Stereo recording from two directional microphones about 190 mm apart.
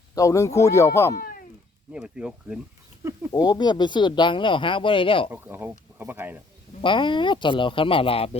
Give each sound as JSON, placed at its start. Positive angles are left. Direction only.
{"t": 0.1, "sound": "speech", "side_deg": 15}
{"t": 1.1, "sound": "cat", "side_deg": 50}
{"t": 1.9, "sound": "speech", "side_deg": -5}
{"t": 3.3, "sound": "speech", "side_deg": 20}
{"t": 5.3, "sound": "speech", "side_deg": -10}
{"t": 6.8, "sound": "speech", "side_deg": 25}